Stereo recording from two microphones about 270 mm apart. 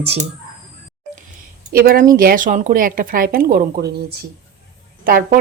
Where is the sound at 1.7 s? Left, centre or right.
Right.